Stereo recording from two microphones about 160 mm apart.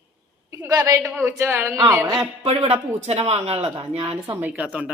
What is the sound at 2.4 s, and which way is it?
Speech, 40° right (ahead or behind).